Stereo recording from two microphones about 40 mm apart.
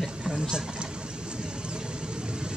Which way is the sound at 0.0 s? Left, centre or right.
Centre.